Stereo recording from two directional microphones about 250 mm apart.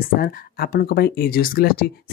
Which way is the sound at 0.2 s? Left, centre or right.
Left.